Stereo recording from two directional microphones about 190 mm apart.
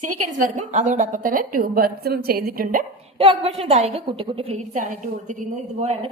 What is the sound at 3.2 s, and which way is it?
A woman's voice, 30° right (ahead or behind).